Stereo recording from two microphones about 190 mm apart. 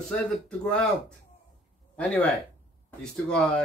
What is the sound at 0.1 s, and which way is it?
Speech, 5° left (ahead or behind).